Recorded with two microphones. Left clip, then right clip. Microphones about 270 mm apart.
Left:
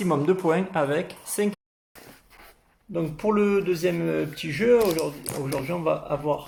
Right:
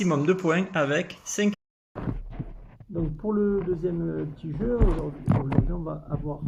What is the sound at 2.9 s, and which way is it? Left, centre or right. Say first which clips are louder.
Speech: left 4 dB; left.